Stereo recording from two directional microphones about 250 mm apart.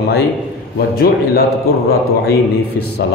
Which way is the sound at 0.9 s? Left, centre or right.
Left.